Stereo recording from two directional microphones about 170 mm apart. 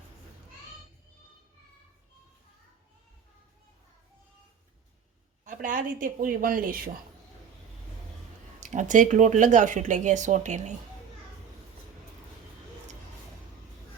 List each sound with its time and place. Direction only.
5.5 s speech: 50° right (ahead or behind)
8.6 s speech: 45° right (ahead or behind)